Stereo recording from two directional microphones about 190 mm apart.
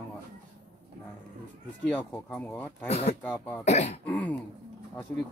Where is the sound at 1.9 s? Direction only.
10° left (ahead or behind).